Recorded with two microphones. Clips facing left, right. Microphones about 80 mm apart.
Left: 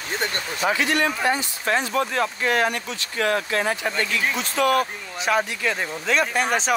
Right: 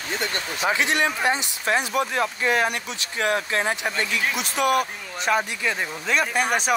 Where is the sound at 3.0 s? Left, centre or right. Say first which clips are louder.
Left 1 dB; right.